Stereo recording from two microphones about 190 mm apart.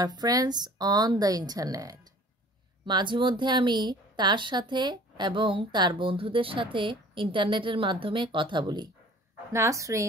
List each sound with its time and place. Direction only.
0.0 s a woman's voice: 20° right (ahead or behind)